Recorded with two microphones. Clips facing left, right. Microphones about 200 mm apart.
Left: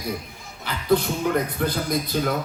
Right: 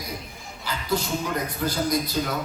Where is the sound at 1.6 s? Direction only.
55° left (ahead or behind).